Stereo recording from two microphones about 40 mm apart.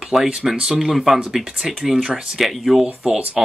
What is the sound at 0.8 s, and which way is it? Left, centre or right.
Speech, centre.